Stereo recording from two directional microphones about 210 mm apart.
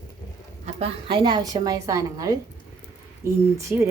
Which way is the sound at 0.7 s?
25° right (ahead or behind).